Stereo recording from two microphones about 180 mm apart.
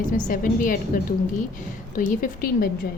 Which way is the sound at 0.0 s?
45° left (ahead or behind).